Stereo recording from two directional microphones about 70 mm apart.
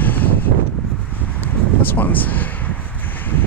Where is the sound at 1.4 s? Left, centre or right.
Left.